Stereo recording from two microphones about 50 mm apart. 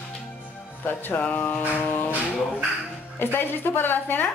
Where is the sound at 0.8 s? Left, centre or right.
Left.